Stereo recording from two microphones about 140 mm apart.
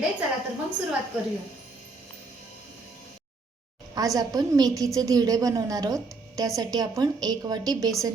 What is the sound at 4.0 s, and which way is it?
A woman's voice, 25° right (ahead or behind).